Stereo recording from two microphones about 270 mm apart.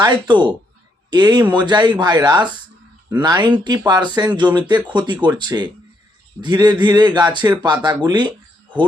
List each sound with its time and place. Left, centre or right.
0.0 s speech: centre